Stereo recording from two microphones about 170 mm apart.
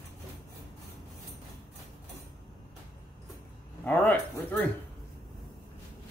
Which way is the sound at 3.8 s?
5° left (ahead or behind).